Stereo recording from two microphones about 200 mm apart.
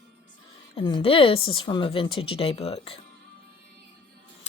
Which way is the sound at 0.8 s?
25° left (ahead or behind).